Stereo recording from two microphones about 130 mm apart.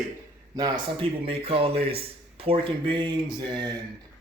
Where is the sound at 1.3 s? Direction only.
50° right (ahead or behind).